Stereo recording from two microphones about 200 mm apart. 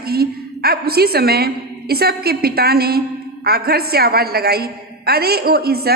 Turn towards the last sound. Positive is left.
turn(degrees=-50)  # may be behind; listen again after turning